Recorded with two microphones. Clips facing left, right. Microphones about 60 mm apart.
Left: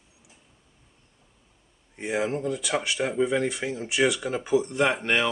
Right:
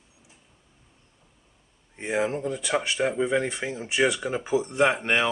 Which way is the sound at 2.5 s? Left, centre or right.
Right.